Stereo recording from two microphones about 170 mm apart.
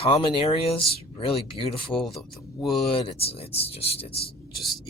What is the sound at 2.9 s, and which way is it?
Speech, 35° left (ahead or behind).